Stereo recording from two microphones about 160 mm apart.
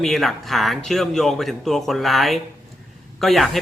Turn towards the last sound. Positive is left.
turn(degrees=0)  # may be behind; listen again after turning